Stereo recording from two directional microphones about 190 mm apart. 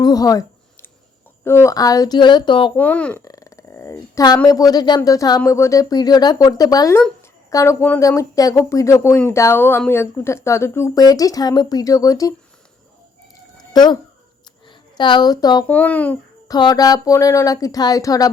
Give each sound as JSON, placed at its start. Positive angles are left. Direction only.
{"t": 0.0, "sound": "a sound", "side_deg": 20}
{"t": 1.5, "sound": "speech", "side_deg": 15}
{"t": 2.7, "sound": "speech", "side_deg": 10}
{"t": 13.6, "sound": "a sound", "side_deg": 20}
{"t": 14.7, "sound": "speech", "side_deg": 25}
{"t": 15.6, "sound": "speech", "side_deg": 10}
{"t": 16.5, "sound": "speech", "side_deg": 20}